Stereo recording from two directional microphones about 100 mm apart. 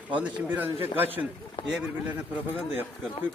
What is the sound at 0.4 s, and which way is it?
Speech, 15° right (ahead or behind).